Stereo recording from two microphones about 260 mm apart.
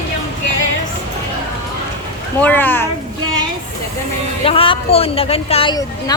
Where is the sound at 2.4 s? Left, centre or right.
Centre.